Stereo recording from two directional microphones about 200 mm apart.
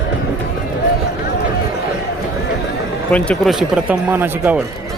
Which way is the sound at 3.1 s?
5° left (ahead or behind).